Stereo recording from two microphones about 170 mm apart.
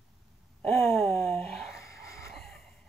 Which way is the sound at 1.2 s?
Centre (ahead or behind).